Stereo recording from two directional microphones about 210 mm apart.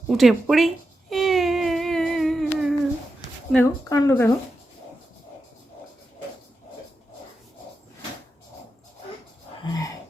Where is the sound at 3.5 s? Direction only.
15° left (ahead or behind).